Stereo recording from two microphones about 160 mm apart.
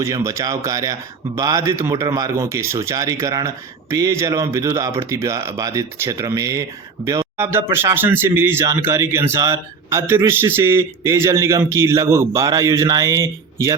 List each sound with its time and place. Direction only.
0.0 s speech: 20° right (ahead or behind)